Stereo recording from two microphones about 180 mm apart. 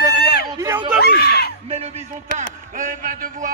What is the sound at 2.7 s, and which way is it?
Speech, 45° right (ahead or behind).